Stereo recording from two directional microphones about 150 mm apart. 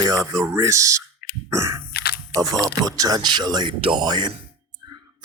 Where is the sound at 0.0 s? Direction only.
25° right (ahead or behind).